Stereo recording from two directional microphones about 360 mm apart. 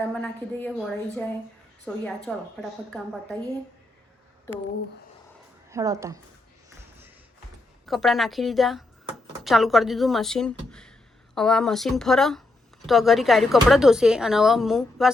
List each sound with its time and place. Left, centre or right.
0.1 s speech: centre
5.7 s speech: centre
7.9 s speech: centre